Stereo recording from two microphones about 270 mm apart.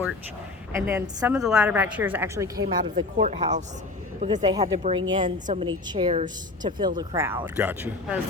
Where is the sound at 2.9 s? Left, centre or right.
Right.